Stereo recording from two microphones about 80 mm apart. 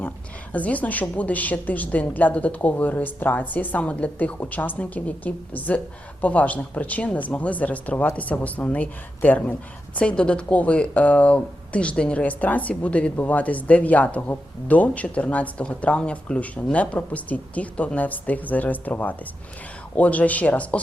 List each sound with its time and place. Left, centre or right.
0.5 s speech: centre